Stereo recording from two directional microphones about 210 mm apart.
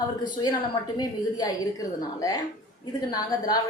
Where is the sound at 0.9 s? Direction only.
20° left (ahead or behind).